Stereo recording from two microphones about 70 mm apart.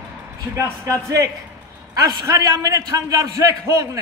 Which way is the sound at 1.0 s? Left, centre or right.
Right.